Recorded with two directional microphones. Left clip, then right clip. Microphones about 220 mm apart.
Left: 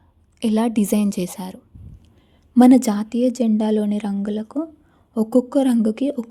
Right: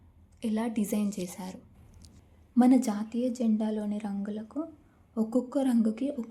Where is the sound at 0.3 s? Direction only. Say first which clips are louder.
Left 12 dB; 45° left (ahead or behind).